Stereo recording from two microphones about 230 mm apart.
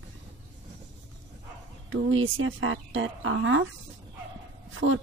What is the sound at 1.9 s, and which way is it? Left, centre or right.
Speech, right.